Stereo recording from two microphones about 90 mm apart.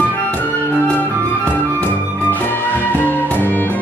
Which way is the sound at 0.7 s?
20° left (ahead or behind).